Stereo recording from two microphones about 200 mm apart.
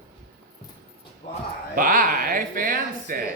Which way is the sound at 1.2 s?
30° left (ahead or behind).